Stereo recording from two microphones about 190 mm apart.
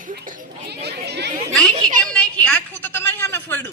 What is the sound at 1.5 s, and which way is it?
Children playing, centre (ahead or behind).